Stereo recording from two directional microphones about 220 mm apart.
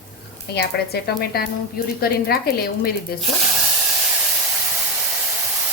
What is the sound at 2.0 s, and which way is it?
Speech, 45° left (ahead or behind).